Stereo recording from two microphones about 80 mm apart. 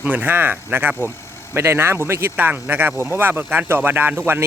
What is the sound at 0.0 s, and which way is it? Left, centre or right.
Speech, right.